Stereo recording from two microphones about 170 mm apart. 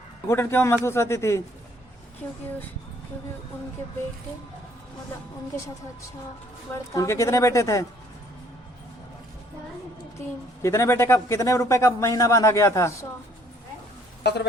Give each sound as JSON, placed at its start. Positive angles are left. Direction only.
{"t": 0.3, "sound": "a woman's voice", "side_deg": 15}
{"t": 6.7, "sound": "a woman's voice", "side_deg": 20}
{"t": 10.2, "sound": "a woman's voice", "side_deg": 15}